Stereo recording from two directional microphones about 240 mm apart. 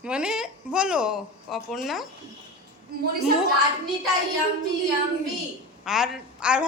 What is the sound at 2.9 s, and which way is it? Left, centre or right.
Speech, right.